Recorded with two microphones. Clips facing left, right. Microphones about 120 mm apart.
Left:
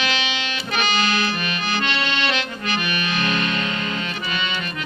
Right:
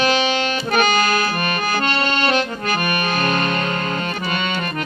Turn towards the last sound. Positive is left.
turn(degrees=-50)  # may be behind; listen again after turning